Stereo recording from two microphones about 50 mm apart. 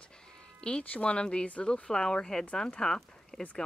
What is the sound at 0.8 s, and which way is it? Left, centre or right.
A woman's voice, left.